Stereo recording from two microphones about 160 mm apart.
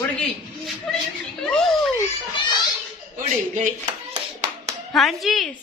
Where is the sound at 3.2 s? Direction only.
50° right (ahead or behind).